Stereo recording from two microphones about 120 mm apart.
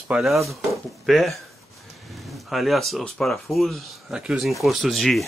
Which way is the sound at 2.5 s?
Centre (ahead or behind).